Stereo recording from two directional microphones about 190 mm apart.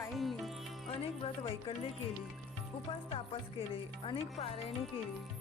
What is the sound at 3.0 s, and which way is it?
Speech, 30° left (ahead or behind).